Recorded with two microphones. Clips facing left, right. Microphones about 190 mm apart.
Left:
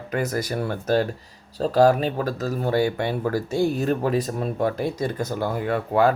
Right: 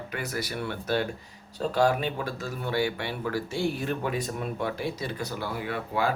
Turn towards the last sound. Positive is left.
turn(degrees=45)  # may be behind; listen again after turning